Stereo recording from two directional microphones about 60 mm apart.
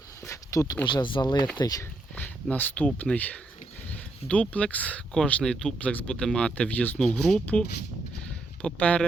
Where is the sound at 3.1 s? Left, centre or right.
Left.